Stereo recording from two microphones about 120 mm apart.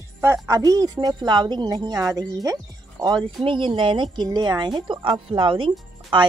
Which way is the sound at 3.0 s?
40° right (ahead or behind).